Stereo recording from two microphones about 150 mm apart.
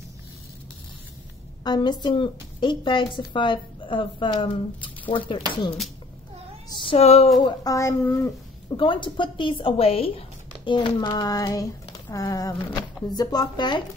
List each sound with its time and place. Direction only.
1.6 s a woman's voice: 30° left (ahead or behind)
6.8 s speech: 40° left (ahead or behind)
7.6 s speech: 20° left (ahead or behind)
8.7 s a woman's voice: 35° left (ahead or behind)